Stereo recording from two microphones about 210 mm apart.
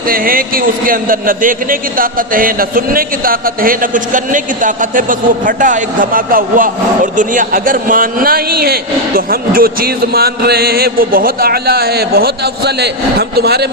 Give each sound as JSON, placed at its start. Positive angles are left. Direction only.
{"t": 0.1, "sound": "a man's voice", "side_deg": -45}